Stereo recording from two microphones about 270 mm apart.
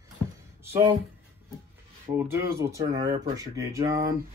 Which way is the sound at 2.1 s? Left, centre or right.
Centre.